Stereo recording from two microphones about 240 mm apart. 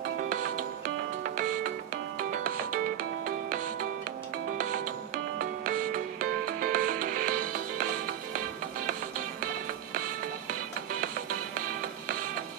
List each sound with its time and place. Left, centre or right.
0.0 s music: right